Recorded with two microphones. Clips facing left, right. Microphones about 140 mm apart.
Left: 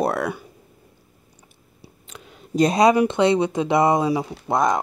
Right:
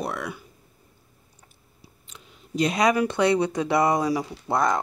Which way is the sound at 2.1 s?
70° left (ahead or behind).